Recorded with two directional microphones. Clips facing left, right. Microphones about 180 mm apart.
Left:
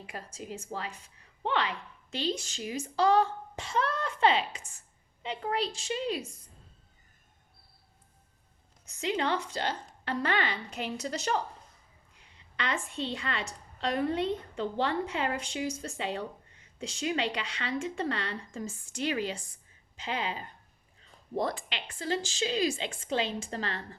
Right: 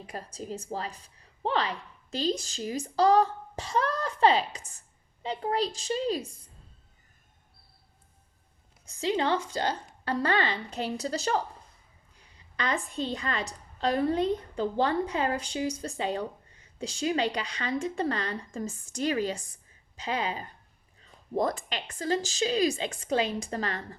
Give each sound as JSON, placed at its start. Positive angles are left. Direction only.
{"t": 0.0, "sound": "a woman's voice", "side_deg": -40}
{"t": 8.9, "sound": "a woman's voice", "side_deg": -35}
{"t": 12.5, "sound": "a woman's voice", "side_deg": -35}